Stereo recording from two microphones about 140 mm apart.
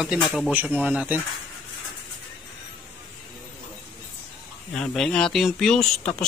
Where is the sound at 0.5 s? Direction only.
10° right (ahead or behind).